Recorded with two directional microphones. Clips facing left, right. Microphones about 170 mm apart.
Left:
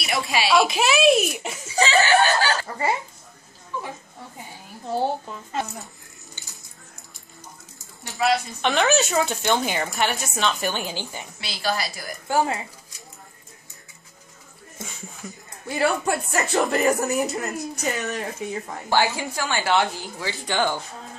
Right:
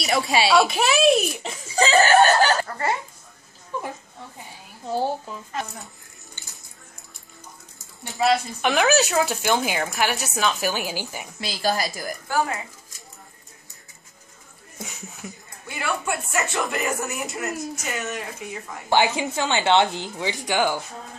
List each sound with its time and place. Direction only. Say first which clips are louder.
0.0 s speech: right 3 dB; 35° right (ahead or behind)
0.6 s speech: even; centre (ahead or behind)
1.8 s speech: right 3 dB; 40° right (ahead or behind)
4.8 s speech: even; centre (ahead or behind)
8.1 s speech: right 1 dB; centre (ahead or behind)
11.4 s a woman's voice: right 3 dB; 40° right (ahead or behind)
12.3 s speech: left 3 dB; 25° left (ahead or behind)
15.2 s speech: even; centre (ahead or behind)
15.7 s speech: left 5 dB; 35° left (ahead or behind)
18.9 s speech: right 2 dB; 20° right (ahead or behind)